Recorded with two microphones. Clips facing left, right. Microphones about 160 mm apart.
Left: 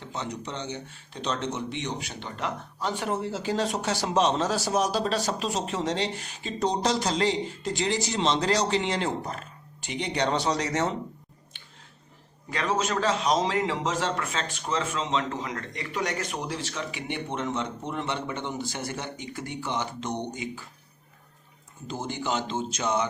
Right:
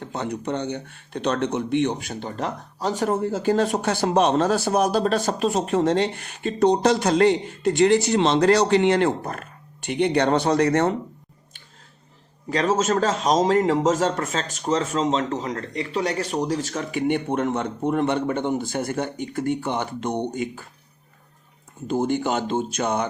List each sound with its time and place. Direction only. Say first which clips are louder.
0.0 s speech: right 6 dB; 55° right (ahead or behind)
12.5 s a man's voice: right 7 dB; 40° right (ahead or behind)
21.8 s speech: right 9 dB; 55° right (ahead or behind)